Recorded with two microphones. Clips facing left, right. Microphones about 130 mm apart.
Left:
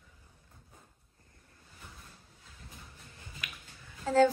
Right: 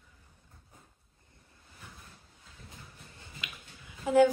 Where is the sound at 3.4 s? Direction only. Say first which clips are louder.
Right 1 dB; 15° right (ahead or behind).